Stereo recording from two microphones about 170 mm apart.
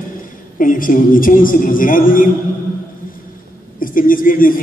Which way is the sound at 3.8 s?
55° left (ahead or behind).